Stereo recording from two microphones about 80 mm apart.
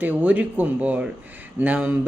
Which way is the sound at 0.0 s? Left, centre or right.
Centre.